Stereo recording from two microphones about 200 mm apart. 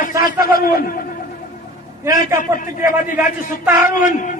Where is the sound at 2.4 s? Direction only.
40° left (ahead or behind).